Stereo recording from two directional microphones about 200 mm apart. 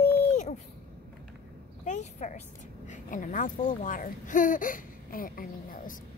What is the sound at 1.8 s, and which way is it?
A woman's voice, 35° left (ahead or behind).